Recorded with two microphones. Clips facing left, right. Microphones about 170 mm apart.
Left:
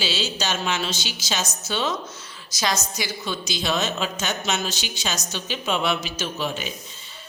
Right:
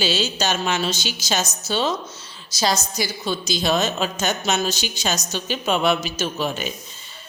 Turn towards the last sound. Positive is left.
turn(degrees=-45)  # may be behind; listen again after turning